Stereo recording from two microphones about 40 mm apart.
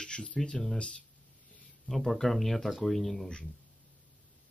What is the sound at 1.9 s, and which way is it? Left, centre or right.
Speech, centre.